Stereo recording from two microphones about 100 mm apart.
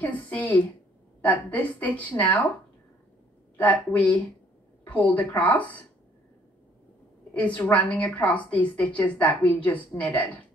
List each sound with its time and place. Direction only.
0.0 s a woman's voice: 15° left (ahead or behind)
3.5 s a woman's voice: 15° left (ahead or behind)
7.3 s a woman's voice: 15° left (ahead or behind)